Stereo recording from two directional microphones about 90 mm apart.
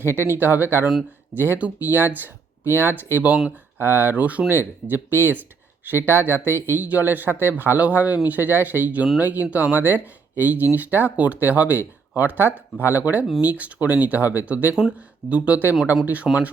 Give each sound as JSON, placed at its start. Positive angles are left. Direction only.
{"t": 0.0, "sound": "speech", "side_deg": -25}